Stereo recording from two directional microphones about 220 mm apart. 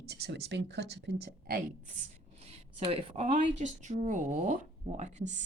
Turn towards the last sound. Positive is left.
turn(degrees=-30)  # may be behind; listen again after turning